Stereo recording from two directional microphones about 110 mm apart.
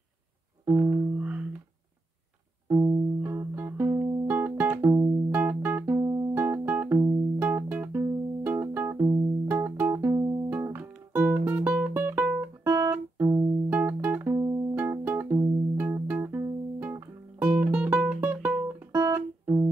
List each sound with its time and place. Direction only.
0.7 s music: 15° right (ahead or behind)
2.7 s music: 25° right (ahead or behind)
5.9 s music: 35° right (ahead or behind)
6.3 s music: 20° right (ahead or behind)
7.0 s music: 30° right (ahead or behind)
7.4 s music: 20° right (ahead or behind)
8.0 s music: 25° right (ahead or behind)
9.0 s music: 30° right (ahead or behind)
9.5 s music: 15° right (ahead or behind)
14.3 s music: 30° right (ahead or behind)
14.8 s music: 20° right (ahead or behind)